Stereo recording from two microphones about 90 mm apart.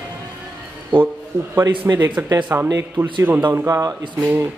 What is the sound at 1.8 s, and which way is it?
Speech, 25° right (ahead or behind).